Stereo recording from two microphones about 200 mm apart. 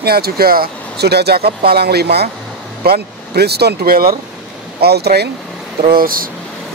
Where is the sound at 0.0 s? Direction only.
50° right (ahead or behind).